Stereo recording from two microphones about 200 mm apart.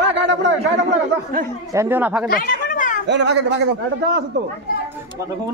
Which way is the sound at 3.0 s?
60° right (ahead or behind).